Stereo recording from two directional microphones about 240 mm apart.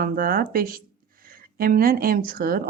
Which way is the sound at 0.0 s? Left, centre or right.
Right.